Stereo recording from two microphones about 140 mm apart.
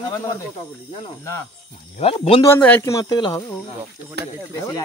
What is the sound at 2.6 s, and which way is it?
Speech, 15° left (ahead or behind).